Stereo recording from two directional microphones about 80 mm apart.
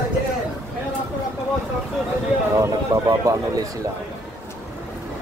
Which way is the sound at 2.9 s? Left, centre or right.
Right.